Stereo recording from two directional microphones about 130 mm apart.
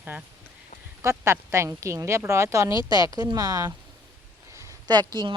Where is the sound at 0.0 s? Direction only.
10° right (ahead or behind).